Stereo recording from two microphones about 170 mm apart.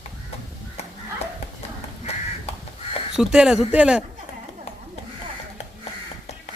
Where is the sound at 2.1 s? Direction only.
40° left (ahead or behind).